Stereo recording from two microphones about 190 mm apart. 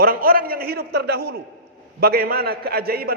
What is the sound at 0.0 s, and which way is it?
A man's voice, 50° right (ahead or behind).